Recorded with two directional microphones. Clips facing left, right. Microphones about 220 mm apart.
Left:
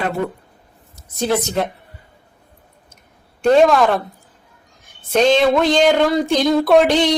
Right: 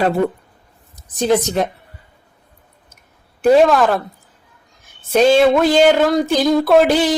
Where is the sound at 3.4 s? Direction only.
5° right (ahead or behind).